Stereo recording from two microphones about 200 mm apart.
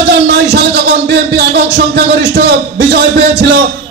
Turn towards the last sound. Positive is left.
turn(degrees=-55)  # may be behind; listen again after turning